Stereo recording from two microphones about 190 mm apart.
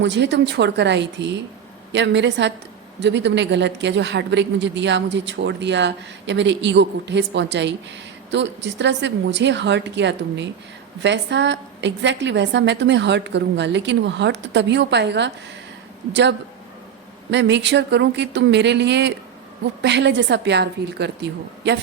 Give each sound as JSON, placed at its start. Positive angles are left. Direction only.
{"t": 0.0, "sound": "a woman's voice", "side_deg": -65}
{"t": 17.3, "sound": "a woman's voice", "side_deg": -70}